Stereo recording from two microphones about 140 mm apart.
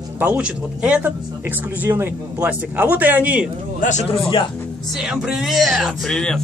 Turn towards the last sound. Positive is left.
turn(degrees=5)  # may be behind; listen again after turning